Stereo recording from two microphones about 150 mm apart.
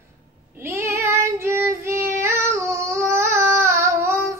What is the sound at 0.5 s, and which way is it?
Child singing, 15° right (ahead or behind).